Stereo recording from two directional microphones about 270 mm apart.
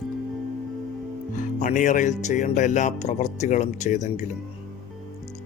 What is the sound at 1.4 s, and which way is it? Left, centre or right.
Speech, left.